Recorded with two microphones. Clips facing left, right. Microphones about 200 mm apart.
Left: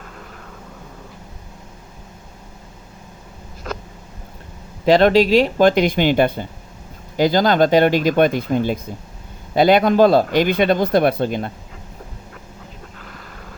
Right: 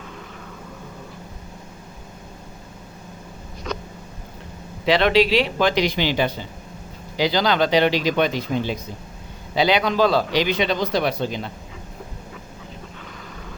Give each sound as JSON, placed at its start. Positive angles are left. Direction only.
{"t": 4.9, "sound": "speech", "side_deg": 45}